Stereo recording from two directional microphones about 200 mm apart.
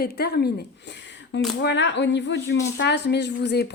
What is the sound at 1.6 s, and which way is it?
A woman's voice, 60° left (ahead or behind).